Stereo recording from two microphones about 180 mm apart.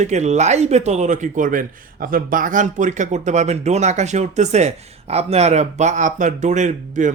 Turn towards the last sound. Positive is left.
turn(degrees=-45)  # may be behind; listen again after turning